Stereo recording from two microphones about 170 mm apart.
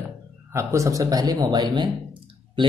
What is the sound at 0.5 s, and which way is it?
Speech, 15° right (ahead or behind).